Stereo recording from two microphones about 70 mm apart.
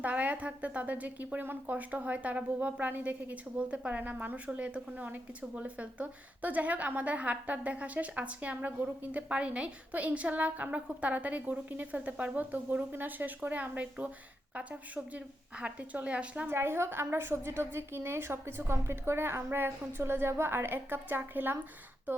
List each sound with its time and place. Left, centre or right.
0.0 s a woman's voice: right
16.5 s a woman's voice: right